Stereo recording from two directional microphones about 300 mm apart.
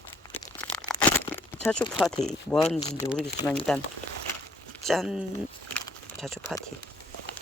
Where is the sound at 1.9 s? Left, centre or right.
Centre.